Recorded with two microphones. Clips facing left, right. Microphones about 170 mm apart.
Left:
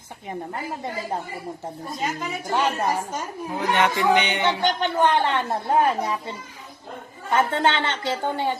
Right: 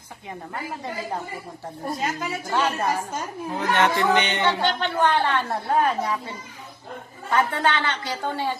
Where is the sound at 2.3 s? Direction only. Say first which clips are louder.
Left 2 dB; 15° left (ahead or behind).